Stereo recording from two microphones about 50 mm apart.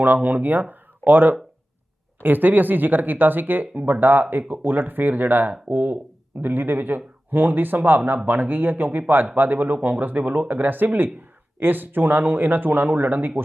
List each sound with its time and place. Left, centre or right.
0.0 s speech: right